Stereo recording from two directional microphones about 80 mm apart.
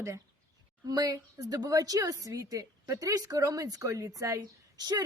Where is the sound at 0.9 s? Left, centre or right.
Right.